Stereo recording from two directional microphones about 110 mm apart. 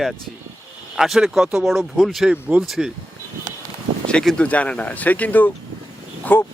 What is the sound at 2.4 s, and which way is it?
Speech, 10° right (ahead or behind).